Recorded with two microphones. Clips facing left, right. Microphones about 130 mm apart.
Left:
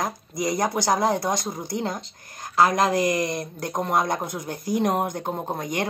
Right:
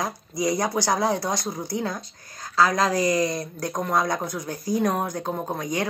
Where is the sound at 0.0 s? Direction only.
50° left (ahead or behind).